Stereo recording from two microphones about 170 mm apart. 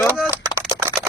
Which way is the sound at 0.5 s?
15° right (ahead or behind).